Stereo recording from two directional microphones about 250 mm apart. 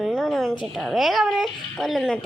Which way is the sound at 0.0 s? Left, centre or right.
Centre.